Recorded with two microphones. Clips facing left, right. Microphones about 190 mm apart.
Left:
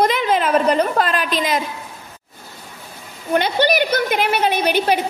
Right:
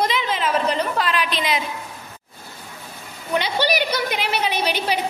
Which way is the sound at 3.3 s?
50° left (ahead or behind).